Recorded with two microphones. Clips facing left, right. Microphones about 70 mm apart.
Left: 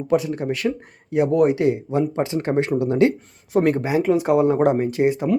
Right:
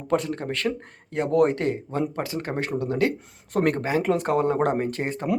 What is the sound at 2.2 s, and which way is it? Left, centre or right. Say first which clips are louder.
Speech: left 7 dB; left.